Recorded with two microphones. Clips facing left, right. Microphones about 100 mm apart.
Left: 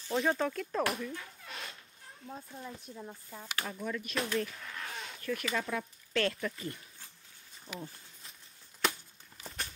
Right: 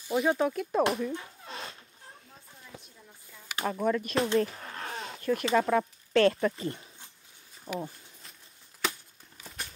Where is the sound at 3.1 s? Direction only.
40° left (ahead or behind).